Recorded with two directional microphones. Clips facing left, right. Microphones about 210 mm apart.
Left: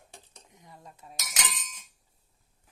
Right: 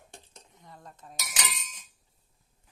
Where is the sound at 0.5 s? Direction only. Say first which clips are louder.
Right 1 dB; 10° left (ahead or behind).